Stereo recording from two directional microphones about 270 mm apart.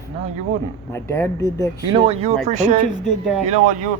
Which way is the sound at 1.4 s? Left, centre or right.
Centre.